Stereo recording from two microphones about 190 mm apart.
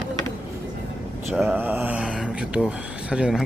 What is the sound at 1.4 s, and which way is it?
Speech, 10° right (ahead or behind).